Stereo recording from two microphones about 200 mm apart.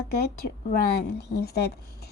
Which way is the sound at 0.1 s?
50° left (ahead or behind).